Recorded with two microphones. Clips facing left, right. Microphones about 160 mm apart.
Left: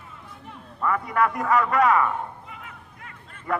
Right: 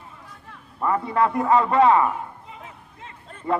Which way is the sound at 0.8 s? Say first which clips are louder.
Right 2 dB; 30° right (ahead or behind).